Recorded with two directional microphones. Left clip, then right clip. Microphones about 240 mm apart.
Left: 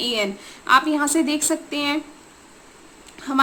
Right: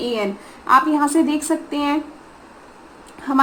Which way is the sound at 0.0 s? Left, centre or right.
Left.